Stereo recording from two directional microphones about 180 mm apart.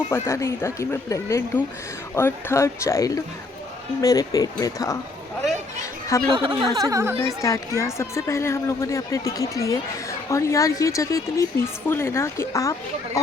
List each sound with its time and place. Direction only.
0.1 s speech: 15° left (ahead or behind)
6.2 s speech: 25° right (ahead or behind)
7.4 s speech: 15° left (ahead or behind)